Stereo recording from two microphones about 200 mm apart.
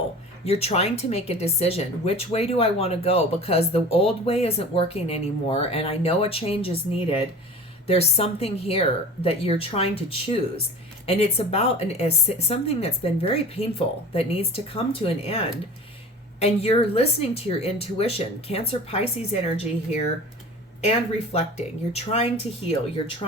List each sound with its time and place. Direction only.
0.4 s a woman's voice: 30° left (ahead or behind)
21.3 s speech: 35° left (ahead or behind)